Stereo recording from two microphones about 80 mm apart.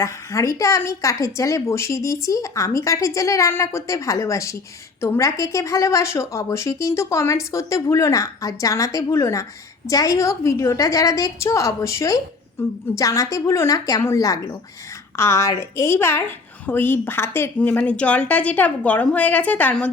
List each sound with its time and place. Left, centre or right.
0.0 s a woman's voice: left
17.6 s a woman's voice: centre